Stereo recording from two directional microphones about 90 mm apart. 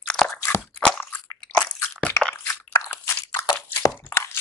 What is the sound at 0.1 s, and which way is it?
Crunch, centre (ahead or behind).